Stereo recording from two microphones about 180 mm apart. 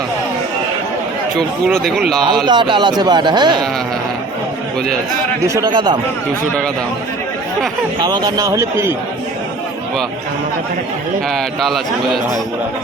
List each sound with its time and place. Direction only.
1.4 s a man's voice: centre (ahead or behind)
2.5 s speech: 25° right (ahead or behind)
5.5 s speech: 20° right (ahead or behind)
8.0 s speech: 20° right (ahead or behind)
11.3 s a man's voice: centre (ahead or behind)